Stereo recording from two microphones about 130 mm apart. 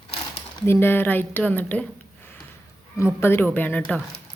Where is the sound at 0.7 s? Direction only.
15° left (ahead or behind).